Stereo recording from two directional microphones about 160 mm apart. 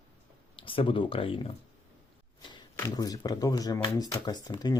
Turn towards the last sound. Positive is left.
turn(degrees=25)  # may be behind; listen again after turning